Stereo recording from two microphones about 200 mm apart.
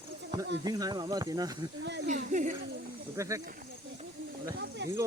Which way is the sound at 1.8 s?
60° right (ahead or behind).